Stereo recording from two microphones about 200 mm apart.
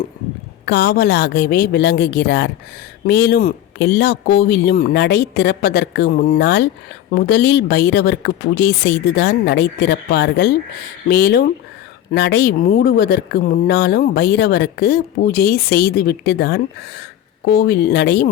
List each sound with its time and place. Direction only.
0.6 s speech: 55° left (ahead or behind)